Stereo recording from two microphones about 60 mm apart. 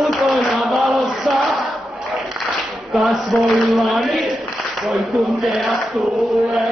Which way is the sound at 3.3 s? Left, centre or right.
Centre.